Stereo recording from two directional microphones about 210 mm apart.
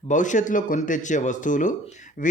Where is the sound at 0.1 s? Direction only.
35° left (ahead or behind).